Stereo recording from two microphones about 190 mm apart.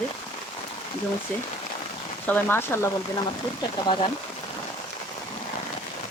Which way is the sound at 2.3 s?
10° left (ahead or behind).